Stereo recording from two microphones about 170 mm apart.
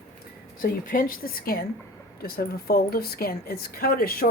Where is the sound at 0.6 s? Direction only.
55° left (ahead or behind).